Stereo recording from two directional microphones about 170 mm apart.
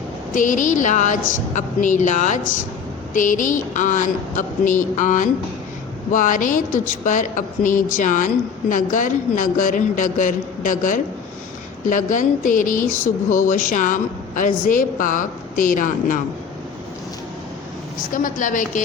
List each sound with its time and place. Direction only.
0.3 s a woman's voice: 50° left (ahead or behind)
18.1 s a woman's voice: 50° left (ahead or behind)